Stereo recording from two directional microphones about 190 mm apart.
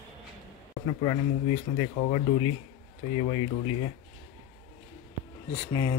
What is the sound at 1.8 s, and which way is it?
Speech, 25° left (ahead or behind).